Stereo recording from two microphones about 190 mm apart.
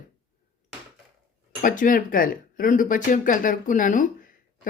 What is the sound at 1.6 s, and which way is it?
Speech, 45° left (ahead or behind).